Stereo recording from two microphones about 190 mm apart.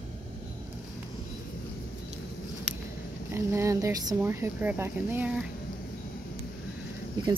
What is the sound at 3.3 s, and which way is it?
Speech, 15° right (ahead or behind).